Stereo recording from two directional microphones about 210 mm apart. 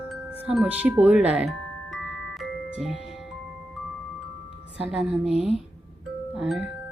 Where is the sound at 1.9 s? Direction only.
Centre (ahead or behind).